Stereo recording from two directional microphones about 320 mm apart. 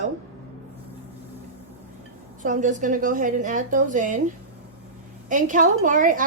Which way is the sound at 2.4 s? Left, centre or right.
Right.